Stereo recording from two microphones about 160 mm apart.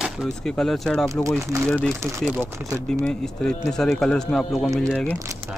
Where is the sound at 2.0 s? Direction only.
15° right (ahead or behind).